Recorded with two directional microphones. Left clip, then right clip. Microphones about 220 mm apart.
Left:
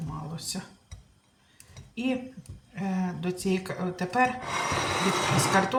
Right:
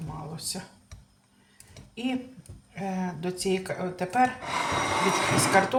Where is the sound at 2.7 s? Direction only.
15° right (ahead or behind).